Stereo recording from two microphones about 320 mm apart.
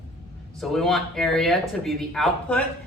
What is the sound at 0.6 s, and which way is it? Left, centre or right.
Speech, centre.